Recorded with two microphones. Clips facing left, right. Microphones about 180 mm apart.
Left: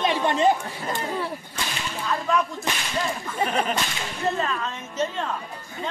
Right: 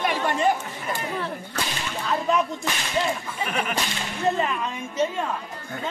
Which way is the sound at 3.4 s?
25° left (ahead or behind).